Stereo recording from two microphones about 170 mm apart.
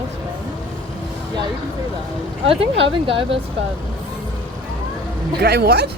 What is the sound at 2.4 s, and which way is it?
Speech, 35° right (ahead or behind).